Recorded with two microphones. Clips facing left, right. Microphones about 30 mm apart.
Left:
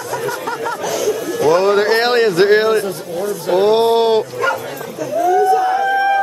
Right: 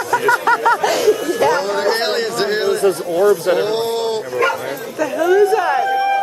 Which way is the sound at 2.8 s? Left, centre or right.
Right.